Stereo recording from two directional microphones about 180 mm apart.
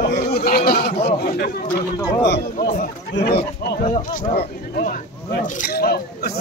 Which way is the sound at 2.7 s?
50° left (ahead or behind).